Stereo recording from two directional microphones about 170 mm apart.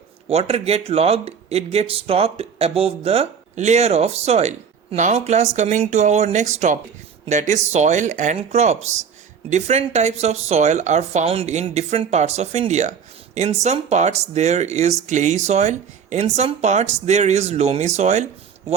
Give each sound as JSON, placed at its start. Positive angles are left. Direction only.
{"t": 0.3, "sound": "speech", "side_deg": -35}